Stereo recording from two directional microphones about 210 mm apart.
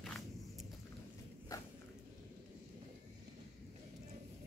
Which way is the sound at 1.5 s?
15° left (ahead or behind).